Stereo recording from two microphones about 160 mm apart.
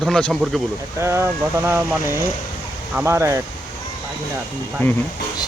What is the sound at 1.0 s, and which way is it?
Speech, 15° right (ahead or behind).